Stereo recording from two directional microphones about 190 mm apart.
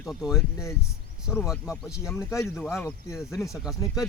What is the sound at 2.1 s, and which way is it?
Speech, 15° left (ahead or behind).